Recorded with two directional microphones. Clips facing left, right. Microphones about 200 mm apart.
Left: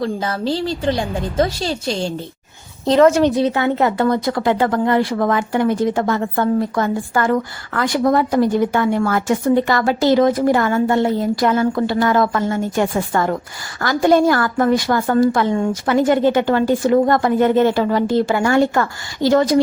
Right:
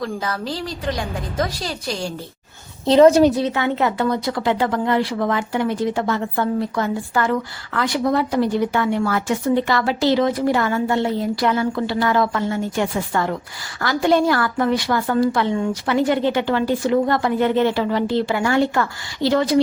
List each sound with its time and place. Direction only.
0.0 s a woman's voice: 30° left (ahead or behind)
3.4 s speech: 40° left (ahead or behind)